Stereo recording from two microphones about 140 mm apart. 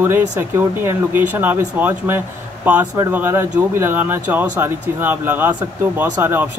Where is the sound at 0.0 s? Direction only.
15° right (ahead or behind).